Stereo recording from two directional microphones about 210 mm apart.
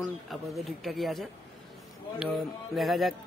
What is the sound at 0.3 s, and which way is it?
A man's voice, centre (ahead or behind).